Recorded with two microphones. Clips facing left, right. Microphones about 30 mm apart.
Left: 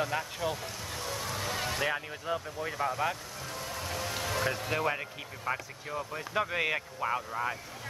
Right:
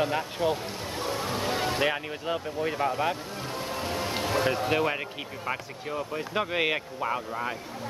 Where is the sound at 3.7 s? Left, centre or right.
Right.